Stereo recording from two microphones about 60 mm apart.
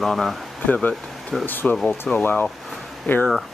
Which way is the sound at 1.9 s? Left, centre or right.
Centre.